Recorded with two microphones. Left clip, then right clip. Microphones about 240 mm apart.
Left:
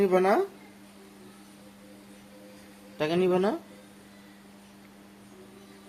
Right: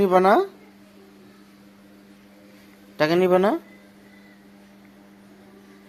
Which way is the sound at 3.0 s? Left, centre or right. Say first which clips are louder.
Right 7 dB; right.